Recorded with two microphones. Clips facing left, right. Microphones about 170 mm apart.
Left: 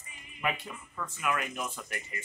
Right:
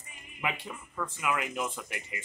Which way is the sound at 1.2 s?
20° right (ahead or behind).